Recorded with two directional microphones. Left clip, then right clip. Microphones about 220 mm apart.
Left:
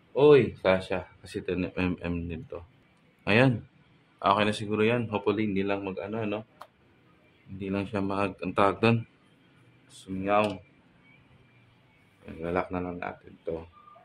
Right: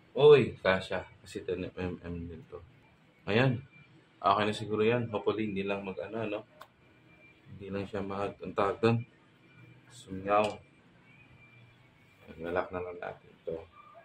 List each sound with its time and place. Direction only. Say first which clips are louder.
0.1 s speech: left 2 dB; 45° left (ahead or behind)
3.3 s speech: left 6 dB; 40° left (ahead or behind)
7.7 s speech: left 6 dB; 40° left (ahead or behind)
10.1 s speech: left 6 dB; 35° left (ahead or behind)
12.4 s speech: left 3 dB; 50° left (ahead or behind)